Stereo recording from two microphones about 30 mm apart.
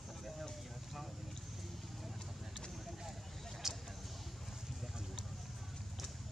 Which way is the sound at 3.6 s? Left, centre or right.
Centre.